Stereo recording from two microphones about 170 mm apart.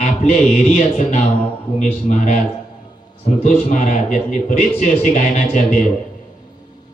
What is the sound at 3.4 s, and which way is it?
A man's voice, 45° left (ahead or behind).